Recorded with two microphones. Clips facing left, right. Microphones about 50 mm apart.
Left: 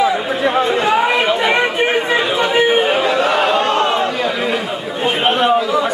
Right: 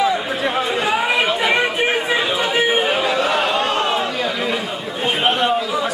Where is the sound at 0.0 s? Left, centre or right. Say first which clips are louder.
Left 3 dB; centre.